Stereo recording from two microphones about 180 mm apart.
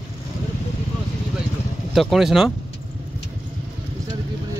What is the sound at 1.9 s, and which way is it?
Speech, centre (ahead or behind).